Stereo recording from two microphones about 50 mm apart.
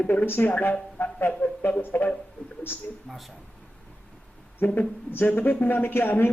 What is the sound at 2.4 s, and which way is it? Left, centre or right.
Speech, left.